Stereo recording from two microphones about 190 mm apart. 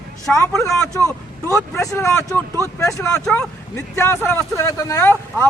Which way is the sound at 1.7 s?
15° left (ahead or behind).